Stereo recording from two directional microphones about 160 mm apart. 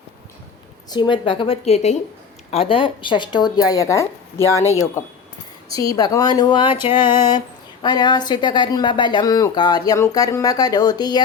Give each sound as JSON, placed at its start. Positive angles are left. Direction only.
{"t": 0.9, "sound": "a woman's voice", "side_deg": 30}
{"t": 5.7, "sound": "speech", "side_deg": 20}